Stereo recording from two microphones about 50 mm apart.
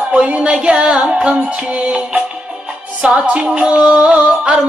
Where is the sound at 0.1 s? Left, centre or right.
Right.